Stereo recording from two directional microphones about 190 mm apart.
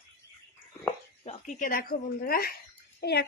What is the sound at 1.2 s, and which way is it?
A child's voice, 35° left (ahead or behind).